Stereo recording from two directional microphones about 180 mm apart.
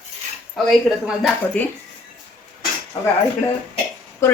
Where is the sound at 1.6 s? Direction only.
5° left (ahead or behind).